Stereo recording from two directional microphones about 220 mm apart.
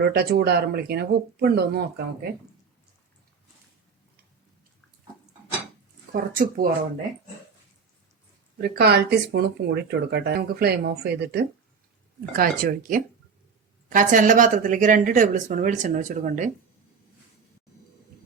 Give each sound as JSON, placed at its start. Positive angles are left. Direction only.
{"t": 0.0, "sound": "speech", "side_deg": -45}
{"t": 6.1, "sound": "speech", "side_deg": -40}
{"t": 8.6, "sound": "speech", "side_deg": -45}